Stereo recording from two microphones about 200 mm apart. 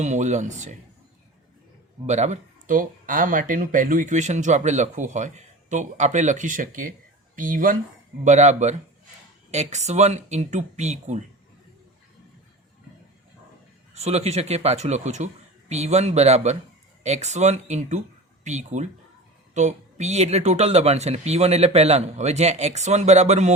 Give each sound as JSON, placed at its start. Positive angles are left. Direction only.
{"t": 0.0, "sound": "speech", "side_deg": -35}
{"t": 2.0, "sound": "speech", "side_deg": -35}
{"t": 13.9, "sound": "speech", "side_deg": -35}